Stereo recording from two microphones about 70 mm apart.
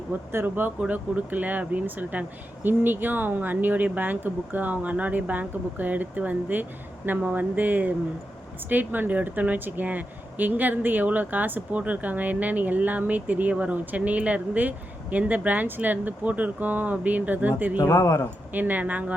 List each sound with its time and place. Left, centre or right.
0.1 s speech: right
17.7 s speech: left
18.5 s speech: right